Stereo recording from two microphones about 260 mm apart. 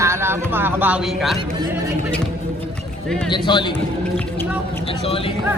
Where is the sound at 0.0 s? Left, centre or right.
Centre.